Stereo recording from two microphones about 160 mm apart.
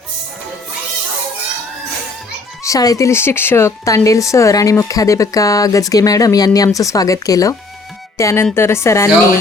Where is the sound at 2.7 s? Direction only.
20° left (ahead or behind).